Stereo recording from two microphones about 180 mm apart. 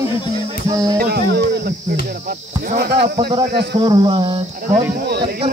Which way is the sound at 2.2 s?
55° right (ahead or behind).